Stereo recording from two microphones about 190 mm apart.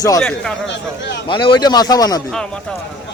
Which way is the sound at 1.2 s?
25° left (ahead or behind).